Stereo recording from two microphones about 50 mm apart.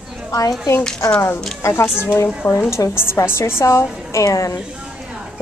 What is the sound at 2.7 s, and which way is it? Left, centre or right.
A woman's voice, left.